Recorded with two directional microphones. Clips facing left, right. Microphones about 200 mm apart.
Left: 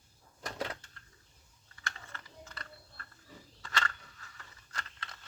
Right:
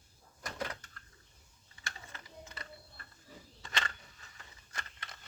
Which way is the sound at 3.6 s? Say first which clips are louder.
Left 3 dB; 20° right (ahead or behind).